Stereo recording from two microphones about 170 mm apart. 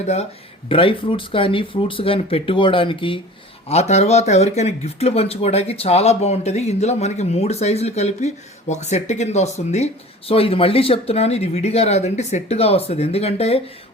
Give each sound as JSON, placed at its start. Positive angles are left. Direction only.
{"t": 0.0, "sound": "speech", "side_deg": 40}